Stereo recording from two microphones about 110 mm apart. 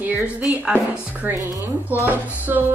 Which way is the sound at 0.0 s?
15° right (ahead or behind).